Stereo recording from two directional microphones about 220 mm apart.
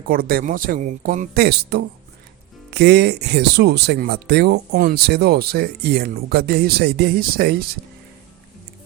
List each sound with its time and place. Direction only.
0.1 s speech: 40° right (ahead or behind)